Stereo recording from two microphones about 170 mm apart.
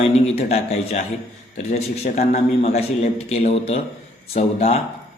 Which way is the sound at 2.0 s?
40° left (ahead or behind).